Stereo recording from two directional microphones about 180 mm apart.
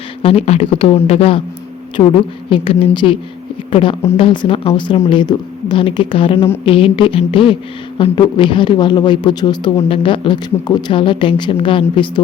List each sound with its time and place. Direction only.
0.2 s speech: 35° left (ahead or behind)
2.0 s speech: 20° left (ahead or behind)